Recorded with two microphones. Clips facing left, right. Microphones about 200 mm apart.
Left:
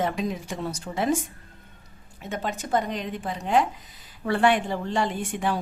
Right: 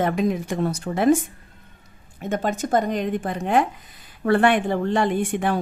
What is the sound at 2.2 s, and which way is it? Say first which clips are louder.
A woman's voice: right 7 dB; 50° right (ahead or behind).